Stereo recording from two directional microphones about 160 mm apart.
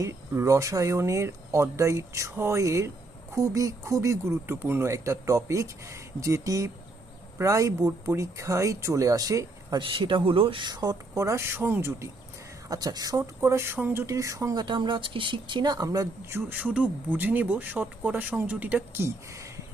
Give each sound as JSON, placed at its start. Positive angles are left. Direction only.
{"t": 0.0, "sound": "speech", "side_deg": -20}
{"t": 16.7, "sound": "speech", "side_deg": -10}